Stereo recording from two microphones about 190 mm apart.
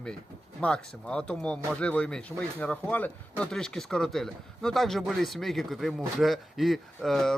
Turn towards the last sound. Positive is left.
turn(degrees=0)  # may be behind; listen again after turning